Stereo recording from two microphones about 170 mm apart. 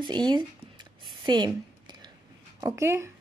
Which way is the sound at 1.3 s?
25° right (ahead or behind).